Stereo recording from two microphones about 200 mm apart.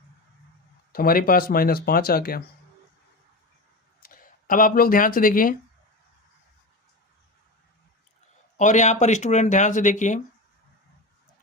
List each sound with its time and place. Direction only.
0.9 s speech: 45° left (ahead or behind)
4.0 s speech: 45° left (ahead or behind)
8.5 s speech: 35° left (ahead or behind)